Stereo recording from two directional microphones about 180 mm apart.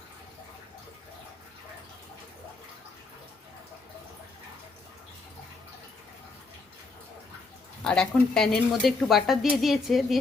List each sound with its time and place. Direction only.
7.9 s a woman's voice: 5° left (ahead or behind)